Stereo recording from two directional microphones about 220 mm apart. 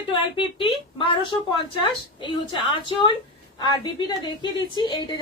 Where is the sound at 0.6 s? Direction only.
20° left (ahead or behind).